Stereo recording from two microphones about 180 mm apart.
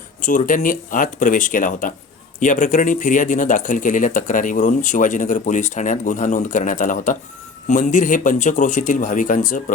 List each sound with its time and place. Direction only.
0.2 s speech: 45° left (ahead or behind)